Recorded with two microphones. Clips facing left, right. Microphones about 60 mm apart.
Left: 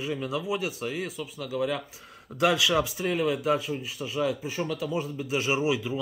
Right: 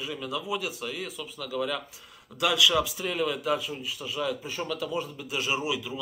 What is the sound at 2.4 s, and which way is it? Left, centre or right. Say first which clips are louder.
Speech: left 1 dB; left.